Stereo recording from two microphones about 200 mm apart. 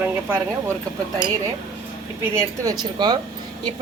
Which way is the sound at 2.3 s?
20° right (ahead or behind).